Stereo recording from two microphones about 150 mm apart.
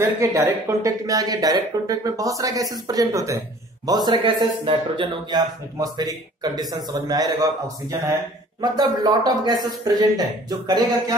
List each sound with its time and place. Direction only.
0.0 s speech: 20° right (ahead or behind)